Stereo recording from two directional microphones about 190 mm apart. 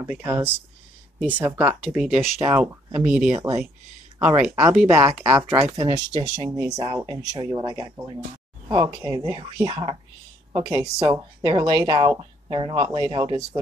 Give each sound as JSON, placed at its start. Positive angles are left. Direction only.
{"t": 0.0, "sound": "speech", "side_deg": -15}
{"t": 5.8, "sound": "speech", "side_deg": -25}